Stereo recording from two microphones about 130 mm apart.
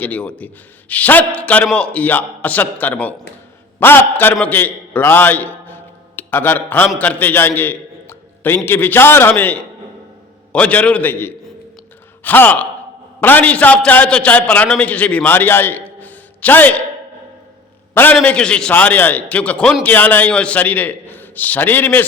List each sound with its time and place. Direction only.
0.0 s a man's voice: 10° left (ahead or behind)
17.9 s a man's voice: 15° left (ahead or behind)